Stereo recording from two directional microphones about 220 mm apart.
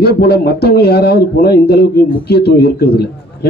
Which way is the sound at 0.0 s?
45° left (ahead or behind).